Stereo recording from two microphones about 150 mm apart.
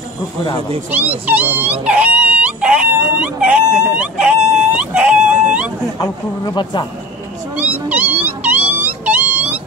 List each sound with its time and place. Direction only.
0.8 s wail: 10° right (ahead or behind)
5.9 s speech: 30° left (ahead or behind)
7.5 s cat: 10° right (ahead or behind)